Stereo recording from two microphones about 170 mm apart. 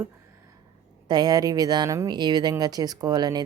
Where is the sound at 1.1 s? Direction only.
25° right (ahead or behind).